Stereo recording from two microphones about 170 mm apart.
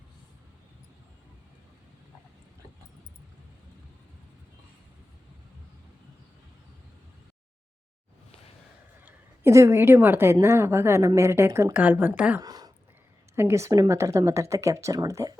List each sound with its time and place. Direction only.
9.0 s a woman's voice: 15° right (ahead or behind)
12.4 s a sound: 20° right (ahead or behind)
13.3 s speech: 15° right (ahead or behind)